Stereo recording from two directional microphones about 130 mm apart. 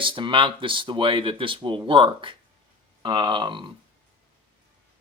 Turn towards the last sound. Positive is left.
turn(degrees=-40)  # may be behind; listen again after turning